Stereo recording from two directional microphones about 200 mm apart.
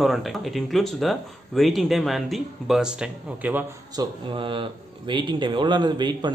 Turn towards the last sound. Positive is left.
turn(degrees=-20)  # may be behind; listen again after turning